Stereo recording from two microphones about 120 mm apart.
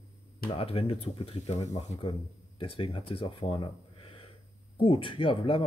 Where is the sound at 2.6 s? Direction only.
50° left (ahead or behind).